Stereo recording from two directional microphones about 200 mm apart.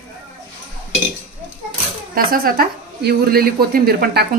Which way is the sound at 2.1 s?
50° right (ahead or behind).